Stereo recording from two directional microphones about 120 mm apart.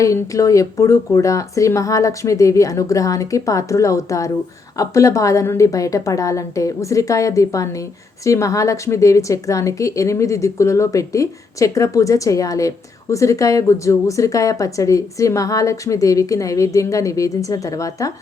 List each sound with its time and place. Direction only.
0.0 s a woman's voice: 25° left (ahead or behind)